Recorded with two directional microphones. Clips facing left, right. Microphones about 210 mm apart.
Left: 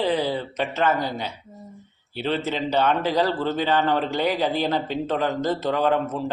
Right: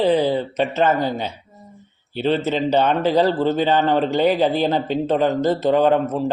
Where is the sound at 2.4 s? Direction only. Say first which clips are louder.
Right 5 dB; 20° right (ahead or behind).